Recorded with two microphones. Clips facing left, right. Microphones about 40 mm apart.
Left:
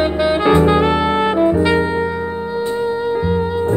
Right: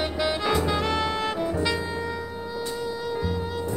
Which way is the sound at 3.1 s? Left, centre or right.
Left.